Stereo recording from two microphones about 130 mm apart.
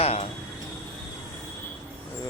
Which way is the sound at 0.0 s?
50° left (ahead or behind).